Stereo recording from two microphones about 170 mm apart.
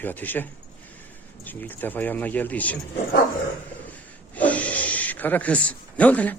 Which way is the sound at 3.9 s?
10° left (ahead or behind).